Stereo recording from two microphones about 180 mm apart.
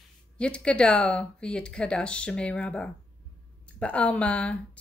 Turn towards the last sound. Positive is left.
turn(degrees=5)  # may be behind; listen again after turning